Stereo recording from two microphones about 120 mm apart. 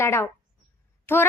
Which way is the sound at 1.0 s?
20° left (ahead or behind).